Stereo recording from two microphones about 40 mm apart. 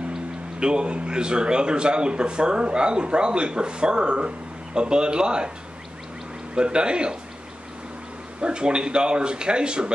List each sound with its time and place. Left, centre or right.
0.1 s speech: right
6.5 s speech: right
8.4 s speech: right